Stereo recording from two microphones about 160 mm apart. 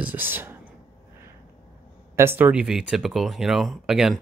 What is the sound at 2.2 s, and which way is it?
Speech, 15° right (ahead or behind).